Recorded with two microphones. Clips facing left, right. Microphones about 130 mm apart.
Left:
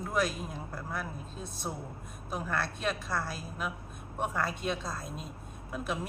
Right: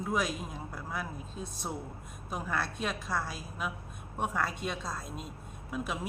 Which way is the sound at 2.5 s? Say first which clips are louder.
Left 1 dB; 5° right (ahead or behind).